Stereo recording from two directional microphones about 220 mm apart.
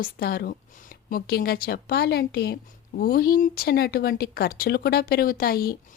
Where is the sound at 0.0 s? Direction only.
45° left (ahead or behind).